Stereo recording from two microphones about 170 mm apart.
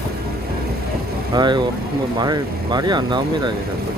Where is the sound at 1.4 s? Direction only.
25° right (ahead or behind).